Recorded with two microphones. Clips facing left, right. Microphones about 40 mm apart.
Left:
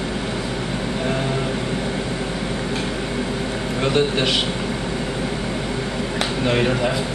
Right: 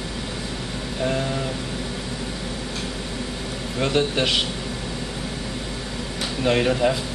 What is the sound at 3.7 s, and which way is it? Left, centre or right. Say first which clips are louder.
Speech: left 2 dB; centre.